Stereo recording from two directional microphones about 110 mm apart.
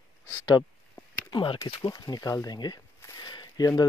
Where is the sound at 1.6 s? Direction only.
40° left (ahead or behind).